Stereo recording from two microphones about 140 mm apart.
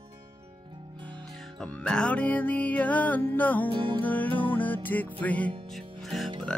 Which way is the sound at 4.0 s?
10° left (ahead or behind).